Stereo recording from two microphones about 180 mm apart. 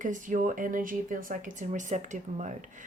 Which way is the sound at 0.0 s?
45° right (ahead or behind).